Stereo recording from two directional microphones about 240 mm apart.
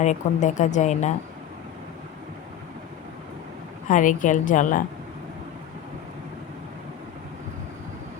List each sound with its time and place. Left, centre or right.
0.0 s a woman's voice: left
3.8 s a woman's voice: left